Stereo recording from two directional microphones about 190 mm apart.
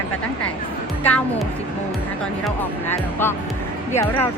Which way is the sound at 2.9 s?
10° left (ahead or behind).